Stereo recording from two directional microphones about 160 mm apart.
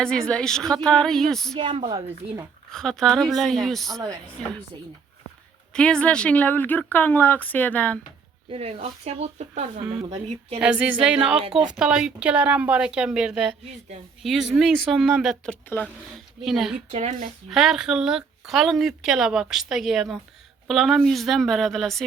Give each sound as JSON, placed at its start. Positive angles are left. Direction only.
{"t": 0.0, "sound": "speech", "side_deg": 5}
{"t": 1.5, "sound": "speech", "side_deg": -35}
{"t": 2.0, "sound": "speech", "side_deg": -20}
{"t": 2.7, "sound": "speech", "side_deg": 5}
{"t": 5.7, "sound": "speech", "side_deg": 5}
{"t": 8.4, "sound": "speech", "side_deg": -40}
{"t": 10.6, "sound": "a sound", "side_deg": -10}
{"t": 11.5, "sound": "speech", "side_deg": -5}
{"t": 16.9, "sound": "speech", "side_deg": -45}
{"t": 17.5, "sound": "speech", "side_deg": 0}